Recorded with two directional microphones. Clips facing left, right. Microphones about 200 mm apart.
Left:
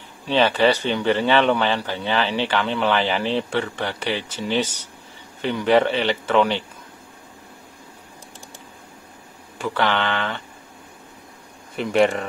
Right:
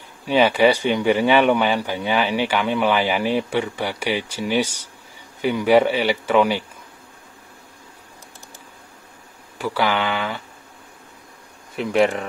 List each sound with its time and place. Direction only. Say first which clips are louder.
0.3 s a man's voice: right 2 dB; 10° right (ahead or behind)
9.6 s a man's voice: right 1 dB; 10° right (ahead or behind)
11.7 s speech: even; centre (ahead or behind)